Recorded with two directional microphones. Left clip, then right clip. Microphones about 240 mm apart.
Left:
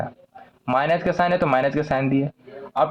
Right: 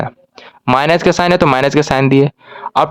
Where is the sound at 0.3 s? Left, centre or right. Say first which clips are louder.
Right 8 dB; right.